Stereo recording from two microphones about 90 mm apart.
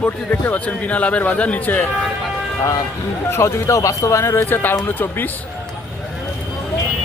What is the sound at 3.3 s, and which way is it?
Speech, 30° left (ahead or behind).